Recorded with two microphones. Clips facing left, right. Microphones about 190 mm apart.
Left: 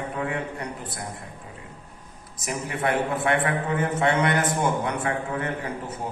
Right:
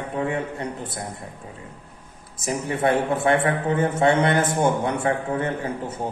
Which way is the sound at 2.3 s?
30° right (ahead or behind).